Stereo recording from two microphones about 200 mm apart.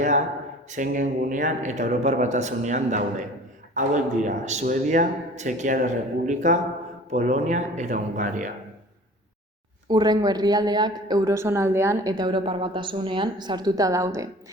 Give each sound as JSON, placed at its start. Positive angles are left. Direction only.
{"t": 0.7, "sound": "speech", "side_deg": -40}
{"t": 9.9, "sound": "a woman's voice", "side_deg": -20}